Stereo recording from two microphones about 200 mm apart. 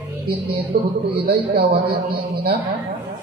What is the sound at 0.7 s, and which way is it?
A man's voice, 50° right (ahead or behind).